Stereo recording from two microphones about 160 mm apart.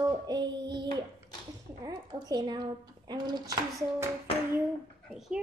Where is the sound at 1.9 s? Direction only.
25° right (ahead or behind).